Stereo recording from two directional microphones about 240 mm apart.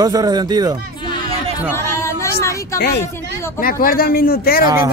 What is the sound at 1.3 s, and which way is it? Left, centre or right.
Chatter, centre.